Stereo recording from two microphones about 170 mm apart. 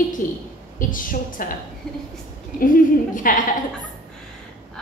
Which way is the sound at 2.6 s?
55° left (ahead or behind).